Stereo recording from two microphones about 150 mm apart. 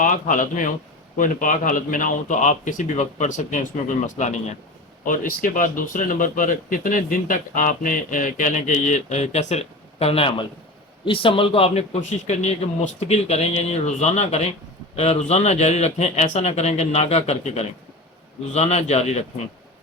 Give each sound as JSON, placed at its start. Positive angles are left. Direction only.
{"t": 0.0, "sound": "speech", "side_deg": 60}
{"t": 5.0, "sound": "a man's voice", "side_deg": 65}